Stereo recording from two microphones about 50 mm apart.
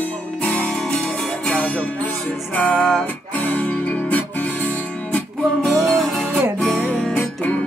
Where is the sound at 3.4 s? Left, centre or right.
Left.